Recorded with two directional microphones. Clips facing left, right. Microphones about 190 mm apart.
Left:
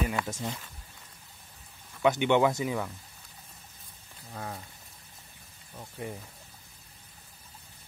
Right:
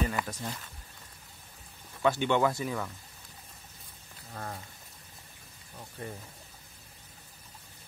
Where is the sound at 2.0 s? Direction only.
15° left (ahead or behind).